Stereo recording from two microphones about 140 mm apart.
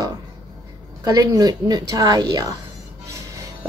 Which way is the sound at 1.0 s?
25° right (ahead or behind).